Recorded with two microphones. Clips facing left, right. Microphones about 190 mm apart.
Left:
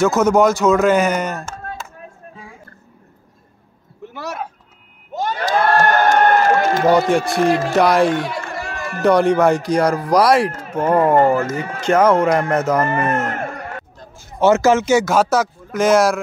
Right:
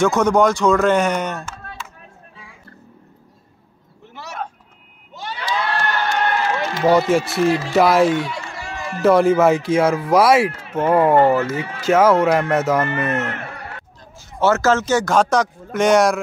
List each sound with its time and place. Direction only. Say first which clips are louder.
0.0 s speech: left 2 dB; 5° left (ahead or behind)
1.4 s a sound: left 4 dB; 45° left (ahead or behind)
5.1 s a sound: left 6 dB; 45° left (ahead or behind)
7.3 s speech: left 2 dB; 50° left (ahead or behind)
7.7 s speech: right 1 dB; centre (ahead or behind)
8.1 s a sound: left 1 dB; 45° left (ahead or behind)
9.0 s speech: even; centre (ahead or behind)
11.1 s speech: even; 45° left (ahead or behind)
11.8 s speech: even; centre (ahead or behind)
12.8 s speech: left 3 dB; 45° left (ahead or behind)
14.4 s speech: left 3 dB; 15° left (ahead or behind)